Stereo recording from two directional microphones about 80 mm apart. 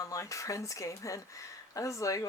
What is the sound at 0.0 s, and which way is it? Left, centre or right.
Speech, left.